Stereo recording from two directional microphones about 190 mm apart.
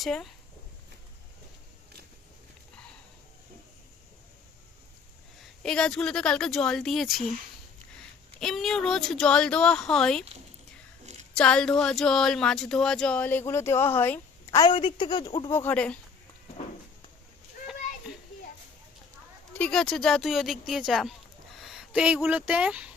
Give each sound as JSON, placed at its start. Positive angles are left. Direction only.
{"t": 0.0, "sound": "speech", "side_deg": 0}
{"t": 5.4, "sound": "speech", "side_deg": 5}
{"t": 8.4, "sound": "speech", "side_deg": 0}
{"t": 11.0, "sound": "a sound", "side_deg": -35}
{"t": 11.3, "sound": "speech", "side_deg": 5}
{"t": 19.5, "sound": "speech", "side_deg": 5}